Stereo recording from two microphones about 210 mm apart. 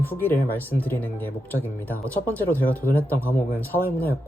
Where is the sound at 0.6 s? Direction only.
10° right (ahead or behind).